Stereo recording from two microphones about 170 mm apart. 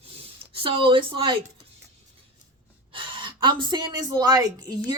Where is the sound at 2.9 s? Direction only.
30° right (ahead or behind).